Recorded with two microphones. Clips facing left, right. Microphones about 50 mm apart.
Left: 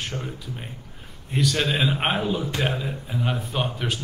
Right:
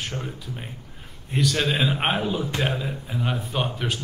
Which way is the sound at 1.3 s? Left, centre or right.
Centre.